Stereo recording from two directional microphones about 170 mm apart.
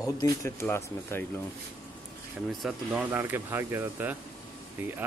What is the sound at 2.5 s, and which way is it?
Speech, centre (ahead or behind).